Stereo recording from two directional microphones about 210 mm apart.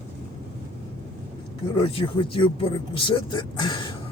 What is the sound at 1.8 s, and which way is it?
Speech, 25° left (ahead or behind).